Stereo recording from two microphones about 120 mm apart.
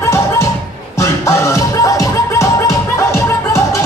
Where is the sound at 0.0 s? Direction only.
25° left (ahead or behind).